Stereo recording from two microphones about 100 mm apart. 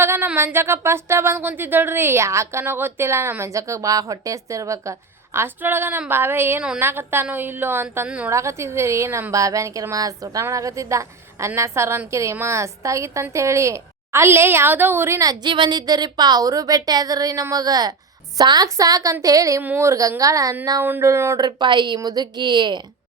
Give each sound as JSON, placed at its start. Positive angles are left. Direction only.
{"t": 0.0, "sound": "a sound", "side_deg": -25}
{"t": 0.3, "sound": "speech", "side_deg": -25}
{"t": 15.4, "sound": "a woman's voice", "side_deg": -55}